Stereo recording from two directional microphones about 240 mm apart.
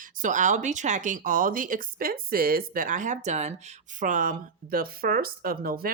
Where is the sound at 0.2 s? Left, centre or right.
Right.